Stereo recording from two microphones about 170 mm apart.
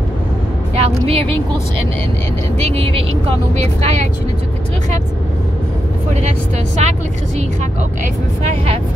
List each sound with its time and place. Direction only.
0.7 s speech: 35° right (ahead or behind)
2.6 s speech: 35° right (ahead or behind)
6.8 s speech: 40° right (ahead or behind)